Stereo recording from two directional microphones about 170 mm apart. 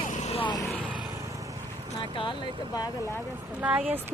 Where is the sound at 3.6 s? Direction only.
10° right (ahead or behind).